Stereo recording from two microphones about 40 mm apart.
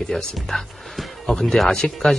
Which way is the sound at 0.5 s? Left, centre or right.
Centre.